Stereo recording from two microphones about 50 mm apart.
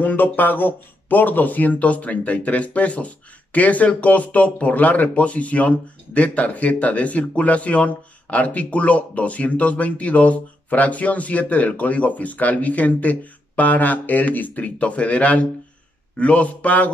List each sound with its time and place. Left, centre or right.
0.0 s speech: left